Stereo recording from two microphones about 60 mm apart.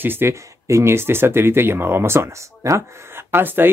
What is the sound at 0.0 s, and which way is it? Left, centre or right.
Speech, right.